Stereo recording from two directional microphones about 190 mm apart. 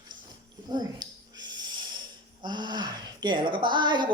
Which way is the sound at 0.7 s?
20° right (ahead or behind).